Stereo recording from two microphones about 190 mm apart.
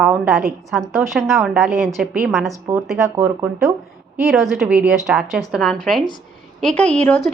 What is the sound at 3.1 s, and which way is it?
Speech, 15° right (ahead or behind).